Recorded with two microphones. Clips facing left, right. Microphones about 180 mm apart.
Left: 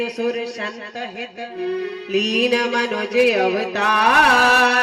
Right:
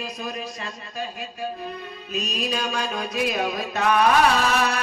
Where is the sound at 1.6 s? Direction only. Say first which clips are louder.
Left 11 dB; 75° left (ahead or behind).